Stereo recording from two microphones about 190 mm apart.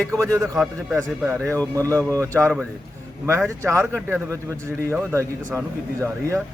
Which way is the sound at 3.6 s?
15° right (ahead or behind).